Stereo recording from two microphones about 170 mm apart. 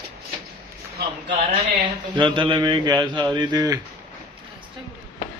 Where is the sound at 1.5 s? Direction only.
30° right (ahead or behind).